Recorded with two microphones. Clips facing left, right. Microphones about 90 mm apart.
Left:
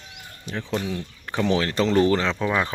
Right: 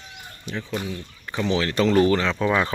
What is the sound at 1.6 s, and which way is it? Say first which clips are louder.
Speech: right 3 dB; 30° left (ahead or behind).